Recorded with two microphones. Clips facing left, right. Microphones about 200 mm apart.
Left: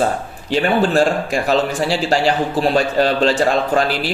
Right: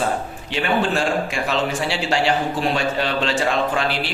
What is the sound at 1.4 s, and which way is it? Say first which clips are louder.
Speech: left 8 dB; 40° left (ahead or behind).